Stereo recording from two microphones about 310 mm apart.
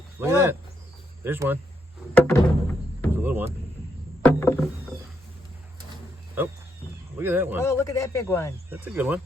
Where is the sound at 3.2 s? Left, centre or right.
Centre.